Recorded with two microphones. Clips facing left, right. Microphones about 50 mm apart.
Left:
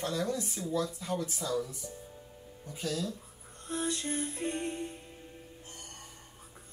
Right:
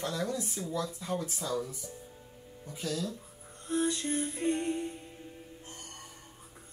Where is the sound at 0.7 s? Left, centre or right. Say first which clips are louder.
Left 2 dB; right.